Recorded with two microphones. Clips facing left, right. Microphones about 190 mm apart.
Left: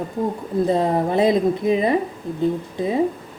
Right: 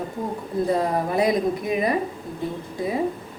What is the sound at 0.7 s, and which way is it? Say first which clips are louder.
A woman's voice: left 3 dB; 25° left (ahead or behind).